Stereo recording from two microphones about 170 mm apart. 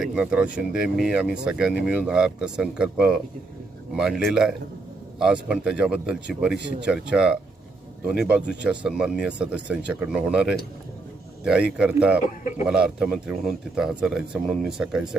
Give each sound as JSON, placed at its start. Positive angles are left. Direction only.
{"t": 0.0, "sound": "speech", "side_deg": -5}
{"t": 12.2, "sound": "a man's voice", "side_deg": 45}
{"t": 12.6, "sound": "speech", "side_deg": -5}